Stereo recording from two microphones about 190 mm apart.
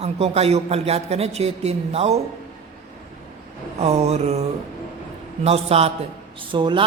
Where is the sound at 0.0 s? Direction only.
35° right (ahead or behind).